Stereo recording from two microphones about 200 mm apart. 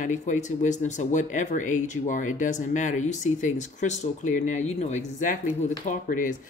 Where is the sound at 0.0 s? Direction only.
40° left (ahead or behind).